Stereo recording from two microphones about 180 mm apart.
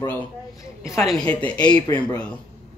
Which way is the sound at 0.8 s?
15° left (ahead or behind).